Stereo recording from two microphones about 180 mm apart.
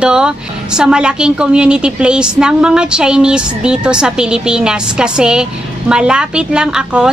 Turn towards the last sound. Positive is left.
turn(degrees=-5)  # may be behind; listen again after turning